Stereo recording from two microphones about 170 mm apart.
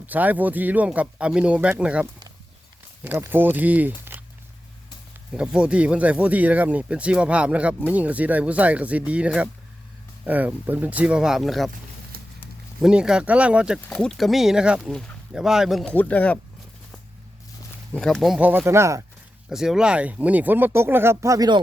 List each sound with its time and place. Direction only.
0.0 s speech: 10° right (ahead or behind)
5.4 s speech: 5° right (ahead or behind)
12.1 s a sound: 60° right (ahead or behind)
12.8 s speech: 5° right (ahead or behind)
17.9 s speech: 5° left (ahead or behind); by 19.0 s 15° right (ahead or behind)
19.5 s speech: 5° right (ahead or behind); by 21.6 s 20° right (ahead or behind)